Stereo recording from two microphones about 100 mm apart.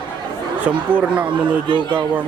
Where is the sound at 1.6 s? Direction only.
50° right (ahead or behind).